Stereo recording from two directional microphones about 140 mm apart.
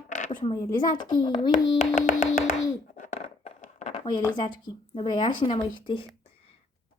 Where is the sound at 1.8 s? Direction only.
65° left (ahead or behind).